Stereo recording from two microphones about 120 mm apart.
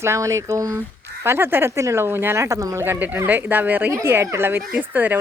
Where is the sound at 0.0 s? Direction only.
25° right (ahead or behind).